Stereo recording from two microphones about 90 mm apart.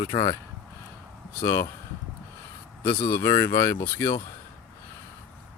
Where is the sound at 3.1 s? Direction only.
30° left (ahead or behind).